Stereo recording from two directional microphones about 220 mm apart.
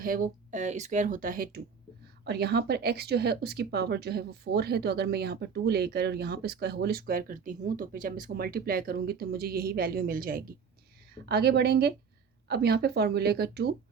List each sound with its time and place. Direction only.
0.0 s speech: 40° right (ahead or behind)